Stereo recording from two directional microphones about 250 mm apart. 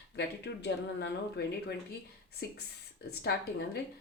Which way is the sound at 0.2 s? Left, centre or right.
Left.